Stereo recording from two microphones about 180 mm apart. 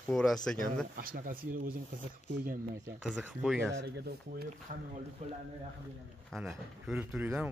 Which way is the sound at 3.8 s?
60° right (ahead or behind).